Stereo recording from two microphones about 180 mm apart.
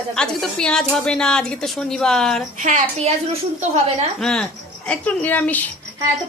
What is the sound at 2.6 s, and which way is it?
Speech, 40° right (ahead or behind).